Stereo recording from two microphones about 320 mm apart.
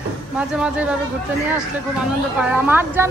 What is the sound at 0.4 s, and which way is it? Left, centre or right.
Speech, centre.